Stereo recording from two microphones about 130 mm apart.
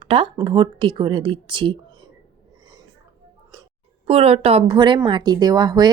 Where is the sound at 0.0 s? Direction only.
45° right (ahead or behind).